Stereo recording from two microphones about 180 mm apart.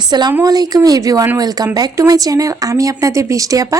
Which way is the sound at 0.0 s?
25° right (ahead or behind).